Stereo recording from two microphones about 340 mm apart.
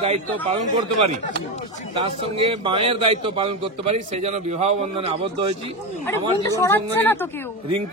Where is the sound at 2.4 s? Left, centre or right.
Centre.